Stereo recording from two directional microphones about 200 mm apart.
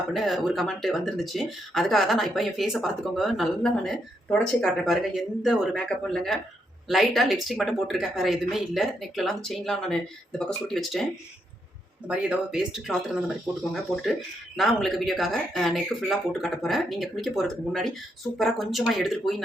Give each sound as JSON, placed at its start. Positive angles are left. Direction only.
{"t": 0.1, "sound": "speech", "side_deg": 0}
{"t": 12.0, "sound": "speech", "side_deg": -5}